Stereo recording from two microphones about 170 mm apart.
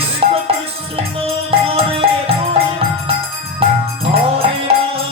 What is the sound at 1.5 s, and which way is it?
Music, 35° right (ahead or behind).